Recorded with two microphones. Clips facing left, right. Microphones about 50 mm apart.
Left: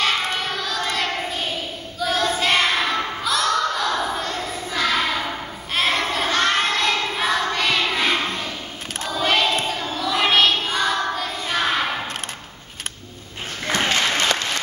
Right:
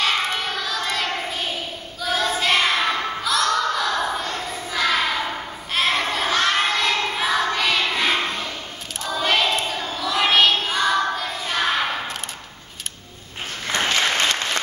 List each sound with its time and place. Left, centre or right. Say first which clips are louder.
0.0 s child singing: even; centre
2.0 s a sound: left 1 dB; centre
5.8 s child singing: even; centre
14.0 s applause: even; right